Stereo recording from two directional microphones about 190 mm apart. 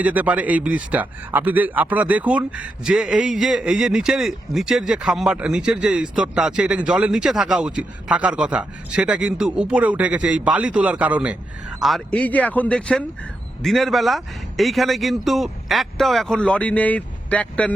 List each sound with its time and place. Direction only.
0.0 s a man's voice: 10° right (ahead or behind); by 17.7 s 5° left (ahead or behind)